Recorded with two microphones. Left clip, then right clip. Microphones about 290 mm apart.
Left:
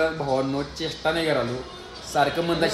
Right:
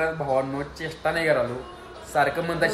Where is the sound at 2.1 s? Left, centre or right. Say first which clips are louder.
Left 1 dB; centre.